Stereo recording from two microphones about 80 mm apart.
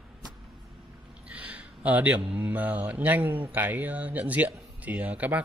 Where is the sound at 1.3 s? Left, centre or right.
Centre.